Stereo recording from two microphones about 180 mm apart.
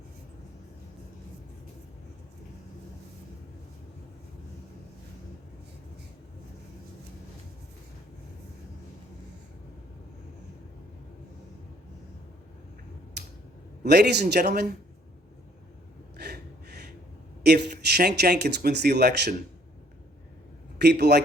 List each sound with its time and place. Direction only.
13.2 s a sound: 65° right (ahead or behind)
13.8 s speech: 65° right (ahead or behind)
16.1 s gasp: 60° right (ahead or behind)
17.4 s speech: 65° right (ahead or behind)
20.7 s a man's voice: 65° right (ahead or behind)